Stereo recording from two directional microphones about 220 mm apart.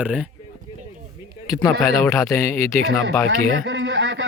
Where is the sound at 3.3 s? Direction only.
55° right (ahead or behind).